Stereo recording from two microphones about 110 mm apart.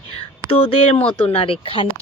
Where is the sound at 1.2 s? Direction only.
60° left (ahead or behind).